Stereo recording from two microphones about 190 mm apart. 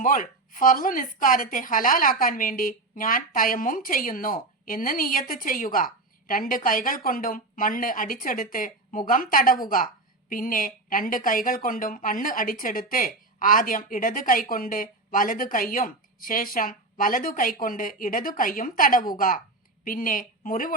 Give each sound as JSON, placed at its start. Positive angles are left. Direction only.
{"t": 0.0, "sound": "a woman's voice", "side_deg": 45}